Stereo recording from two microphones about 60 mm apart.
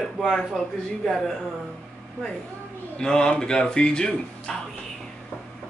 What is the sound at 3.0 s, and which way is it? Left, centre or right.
Speech, centre.